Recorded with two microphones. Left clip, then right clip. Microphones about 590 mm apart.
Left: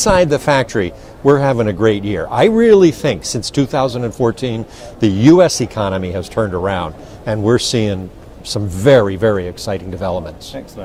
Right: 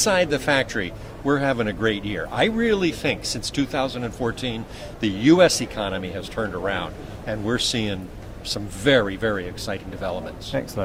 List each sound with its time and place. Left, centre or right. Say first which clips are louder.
0.0 s speech: left 8 dB; left